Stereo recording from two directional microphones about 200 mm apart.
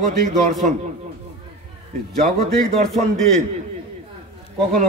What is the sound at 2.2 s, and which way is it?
A man's voice, centre (ahead or behind).